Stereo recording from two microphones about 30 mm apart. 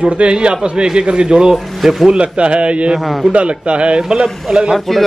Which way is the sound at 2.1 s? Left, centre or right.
Right.